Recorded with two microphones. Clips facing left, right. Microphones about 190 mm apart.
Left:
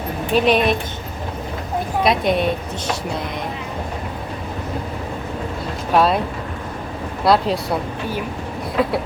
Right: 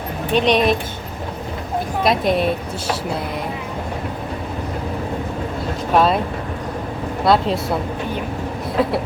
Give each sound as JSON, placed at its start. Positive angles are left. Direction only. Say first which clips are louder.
{"t": 0.3, "sound": "a woman's voice", "louder": "even", "side_deg": 5}
{"t": 2.0, "sound": "a woman's voice", "louder": "right 1 dB", "side_deg": 0}
{"t": 5.9, "sound": "a woman's voice", "louder": "even", "side_deg": 0}
{"t": 7.3, "sound": "a woman's voice", "louder": "even", "side_deg": 0}